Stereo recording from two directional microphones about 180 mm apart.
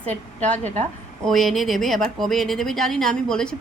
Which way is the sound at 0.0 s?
10° left (ahead or behind).